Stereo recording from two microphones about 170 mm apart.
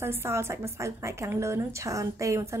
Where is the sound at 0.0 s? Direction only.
15° right (ahead or behind).